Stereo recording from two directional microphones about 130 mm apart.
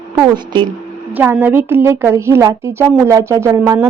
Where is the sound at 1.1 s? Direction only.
15° right (ahead or behind).